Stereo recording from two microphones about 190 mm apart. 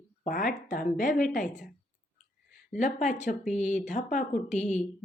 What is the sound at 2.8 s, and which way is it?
Speech, 40° left (ahead or behind).